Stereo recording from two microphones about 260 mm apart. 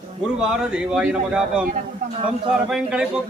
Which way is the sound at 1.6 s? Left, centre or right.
Right.